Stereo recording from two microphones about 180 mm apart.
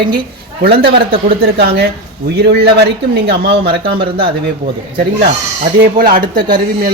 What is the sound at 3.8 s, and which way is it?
Speech, 30° right (ahead or behind).